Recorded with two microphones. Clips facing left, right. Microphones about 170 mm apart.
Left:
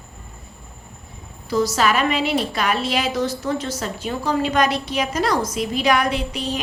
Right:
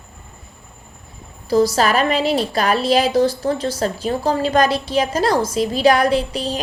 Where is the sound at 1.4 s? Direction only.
35° right (ahead or behind).